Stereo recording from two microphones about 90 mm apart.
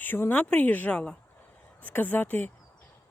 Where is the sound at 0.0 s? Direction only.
20° left (ahead or behind).